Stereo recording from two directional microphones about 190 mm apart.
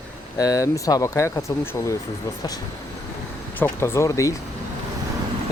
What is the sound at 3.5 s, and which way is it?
Speech, 10° left (ahead or behind).